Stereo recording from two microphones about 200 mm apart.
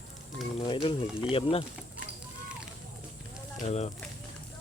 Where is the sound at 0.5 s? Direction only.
25° left (ahead or behind).